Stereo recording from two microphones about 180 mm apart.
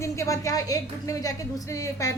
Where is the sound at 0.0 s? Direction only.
15° left (ahead or behind).